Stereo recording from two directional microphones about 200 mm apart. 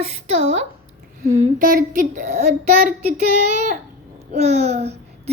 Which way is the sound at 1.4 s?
45° right (ahead or behind).